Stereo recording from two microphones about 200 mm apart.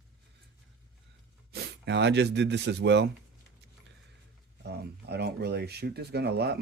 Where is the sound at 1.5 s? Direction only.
60° right (ahead or behind).